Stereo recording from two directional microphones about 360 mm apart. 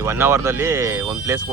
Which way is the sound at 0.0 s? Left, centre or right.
Centre.